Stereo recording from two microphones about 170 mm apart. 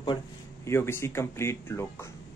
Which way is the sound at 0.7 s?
15° left (ahead or behind).